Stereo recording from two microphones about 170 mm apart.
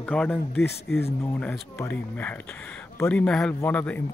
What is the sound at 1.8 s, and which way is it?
Speech, 10° left (ahead or behind).